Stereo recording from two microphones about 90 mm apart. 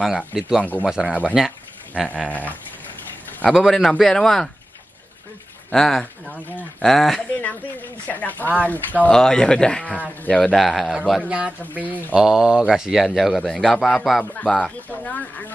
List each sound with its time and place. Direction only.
0.3 s a man's voice: 5° right (ahead or behind)
0.6 s speech: 20° left (ahead or behind)
0.8 s speech: 10° right (ahead or behind)
2.0 s speech: 15° left (ahead or behind)
3.5 s a man's voice: 5° left (ahead or behind)
5.7 s a man's voice: 5° left (ahead or behind)
8.1 s speech: 20° left (ahead or behind)
10.5 s a man's voice: centre (ahead or behind)
11.2 s speech: 15° right (ahead or behind)
12.2 s a man's voice: 10° right (ahead or behind)
14.3 s speech: 10° left (ahead or behind)